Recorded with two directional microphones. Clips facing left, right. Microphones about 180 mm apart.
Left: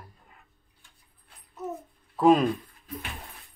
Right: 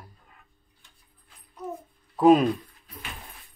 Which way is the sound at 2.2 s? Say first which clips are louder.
Right 2 dB; centre (ahead or behind).